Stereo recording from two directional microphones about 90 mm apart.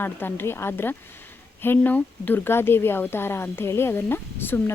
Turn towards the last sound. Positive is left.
turn(degrees=25)  # may be behind; listen again after turning